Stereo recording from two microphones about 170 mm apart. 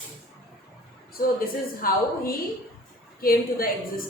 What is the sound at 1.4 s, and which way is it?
A woman's voice, 60° left (ahead or behind).